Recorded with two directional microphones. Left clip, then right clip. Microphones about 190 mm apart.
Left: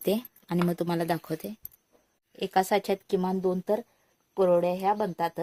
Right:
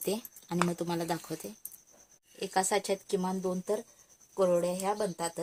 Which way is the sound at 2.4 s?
55° left (ahead or behind).